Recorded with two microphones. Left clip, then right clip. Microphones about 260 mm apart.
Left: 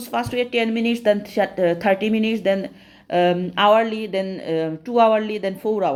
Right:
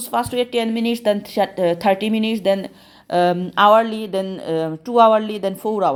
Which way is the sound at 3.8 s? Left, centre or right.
Right.